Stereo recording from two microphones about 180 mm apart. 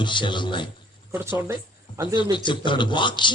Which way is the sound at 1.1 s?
15° right (ahead or behind).